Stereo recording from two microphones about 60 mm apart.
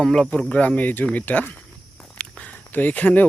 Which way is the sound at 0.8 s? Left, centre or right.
Left.